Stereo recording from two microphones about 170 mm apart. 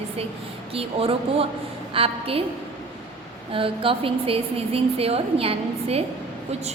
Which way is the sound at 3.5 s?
30° right (ahead or behind).